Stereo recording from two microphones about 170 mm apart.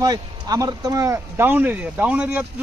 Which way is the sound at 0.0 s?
20° right (ahead or behind).